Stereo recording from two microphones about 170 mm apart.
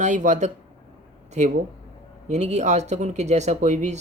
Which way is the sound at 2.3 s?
40° right (ahead or behind).